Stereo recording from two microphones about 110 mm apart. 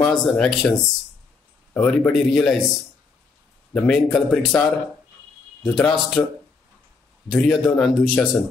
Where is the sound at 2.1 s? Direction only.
Centre (ahead or behind).